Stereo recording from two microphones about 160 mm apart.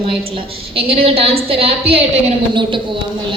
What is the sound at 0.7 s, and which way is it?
A woman's voice, 35° right (ahead or behind).